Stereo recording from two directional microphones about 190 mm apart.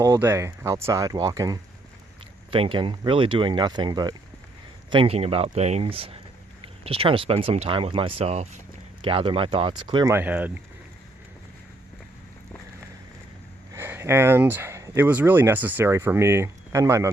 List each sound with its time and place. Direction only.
0.0 s speech: 15° right (ahead or behind)
10.2 s speech: 10° right (ahead or behind)
13.7 s speech: 10° right (ahead or behind)